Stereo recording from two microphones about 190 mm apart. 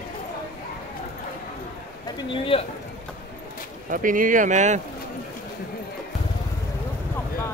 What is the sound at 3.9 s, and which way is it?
Speech, 45° right (ahead or behind).